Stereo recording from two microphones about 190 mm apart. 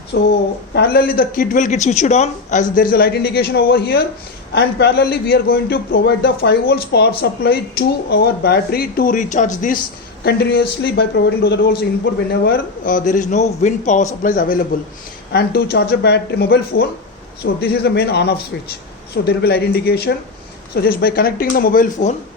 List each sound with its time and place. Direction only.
0.1 s a man's voice: 60° left (ahead or behind); by 9.7 s 40° left (ahead or behind)
10.2 s a man's voice: 55° left (ahead or behind)
15.3 s a man's voice: 55° left (ahead or behind)